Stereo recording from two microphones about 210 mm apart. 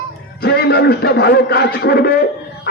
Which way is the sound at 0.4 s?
50° left (ahead or behind).